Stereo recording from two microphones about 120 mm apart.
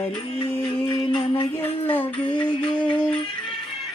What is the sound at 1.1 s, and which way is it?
Music, 45° left (ahead or behind).